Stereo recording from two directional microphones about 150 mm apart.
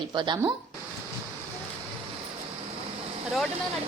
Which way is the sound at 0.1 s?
30° right (ahead or behind).